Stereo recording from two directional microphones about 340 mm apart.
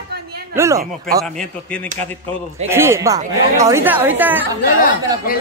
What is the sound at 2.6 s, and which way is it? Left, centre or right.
Speech, centre.